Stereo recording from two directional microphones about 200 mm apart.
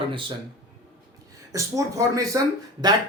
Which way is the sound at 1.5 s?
15° right (ahead or behind).